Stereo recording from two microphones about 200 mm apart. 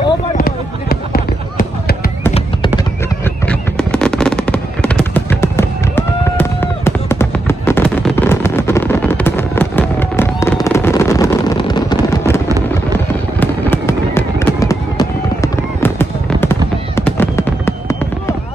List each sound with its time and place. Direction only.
0.4 s a sound: 50° left (ahead or behind)
3.4 s fireworks: 5° left (ahead or behind)
13.4 s fireworks: 10° left (ahead or behind)